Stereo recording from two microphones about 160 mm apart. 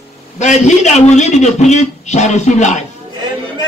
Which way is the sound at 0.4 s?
45° left (ahead or behind).